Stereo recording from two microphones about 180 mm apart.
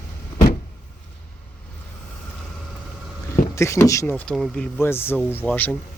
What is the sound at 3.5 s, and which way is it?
Speech, 15° left (ahead or behind).